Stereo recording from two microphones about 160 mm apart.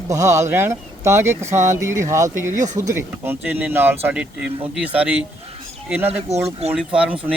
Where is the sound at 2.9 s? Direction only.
15° right (ahead or behind).